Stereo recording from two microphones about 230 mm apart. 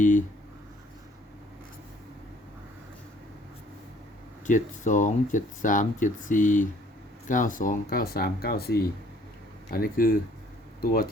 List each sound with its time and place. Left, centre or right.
0.0 s speech: left
4.4 s speech: left